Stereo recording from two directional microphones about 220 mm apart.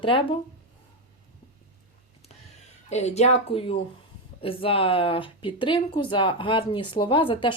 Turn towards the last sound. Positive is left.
turn(degrees=25)  # may be behind; listen again after turning